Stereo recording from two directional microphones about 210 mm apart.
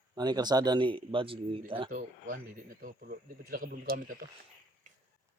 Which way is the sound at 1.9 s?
40° right (ahead or behind).